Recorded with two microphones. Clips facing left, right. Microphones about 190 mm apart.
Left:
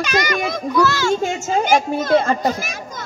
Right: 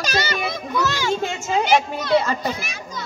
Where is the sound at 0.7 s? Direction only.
20° right (ahead or behind).